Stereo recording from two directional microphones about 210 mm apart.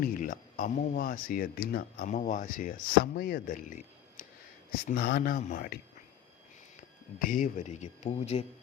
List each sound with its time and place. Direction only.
0.0 s speech: 40° left (ahead or behind)
4.9 s speech: 45° left (ahead or behind)
7.2 s speech: 40° left (ahead or behind)